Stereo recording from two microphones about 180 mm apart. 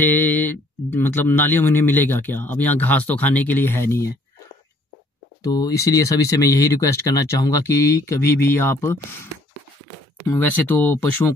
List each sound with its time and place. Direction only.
0.1 s speech: 10° left (ahead or behind)
5.4 s speech: 20° left (ahead or behind)
10.3 s speech: 10° left (ahead or behind)